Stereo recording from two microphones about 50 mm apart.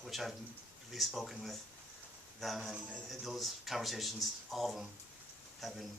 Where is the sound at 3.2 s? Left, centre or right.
Centre.